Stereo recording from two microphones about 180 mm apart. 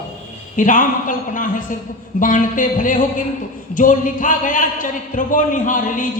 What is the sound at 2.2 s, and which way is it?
A man's voice, 50° left (ahead or behind).